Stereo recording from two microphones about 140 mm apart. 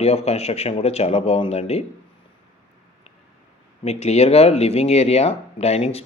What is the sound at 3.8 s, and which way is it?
Speech, 50° left (ahead or behind).